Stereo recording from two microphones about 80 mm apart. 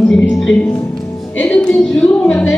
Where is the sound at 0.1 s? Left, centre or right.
Centre.